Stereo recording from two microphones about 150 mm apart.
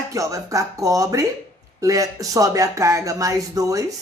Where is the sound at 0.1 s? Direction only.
20° right (ahead or behind).